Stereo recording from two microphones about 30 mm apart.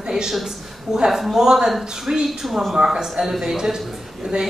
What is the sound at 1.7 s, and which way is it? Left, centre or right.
Speech, centre.